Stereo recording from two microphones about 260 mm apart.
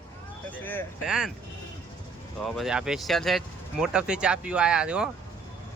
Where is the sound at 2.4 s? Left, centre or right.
Centre.